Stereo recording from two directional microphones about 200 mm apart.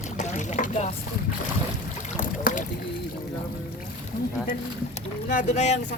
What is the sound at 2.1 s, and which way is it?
Boat, 40° left (ahead or behind).